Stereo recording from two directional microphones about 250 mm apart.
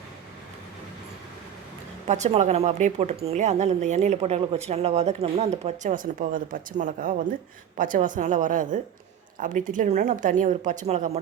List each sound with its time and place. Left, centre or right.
2.0 s a woman's voice: right